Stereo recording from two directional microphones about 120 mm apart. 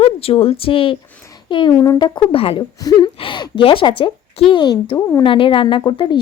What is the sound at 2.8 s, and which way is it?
A woman's voice, 35° left (ahead or behind).